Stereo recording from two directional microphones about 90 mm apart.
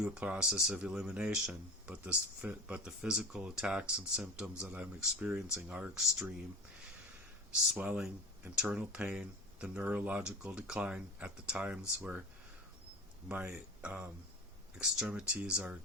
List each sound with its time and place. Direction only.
0.0 s speech: 10° right (ahead or behind)
7.7 s speech: 10° right (ahead or behind)
13.2 s speech: 15° right (ahead or behind)